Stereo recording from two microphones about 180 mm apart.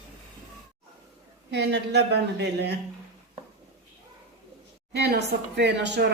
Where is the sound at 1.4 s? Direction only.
70° right (ahead or behind).